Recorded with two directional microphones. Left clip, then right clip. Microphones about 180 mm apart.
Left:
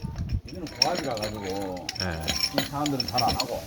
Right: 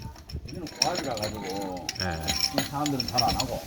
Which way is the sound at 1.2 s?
15° left (ahead or behind).